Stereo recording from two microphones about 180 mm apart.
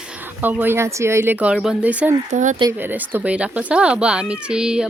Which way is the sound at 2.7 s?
10° right (ahead or behind).